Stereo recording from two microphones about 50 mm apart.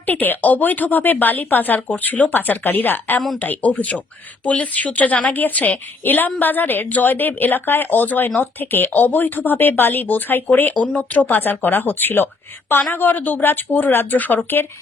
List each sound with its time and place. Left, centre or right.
0.0 s speech: left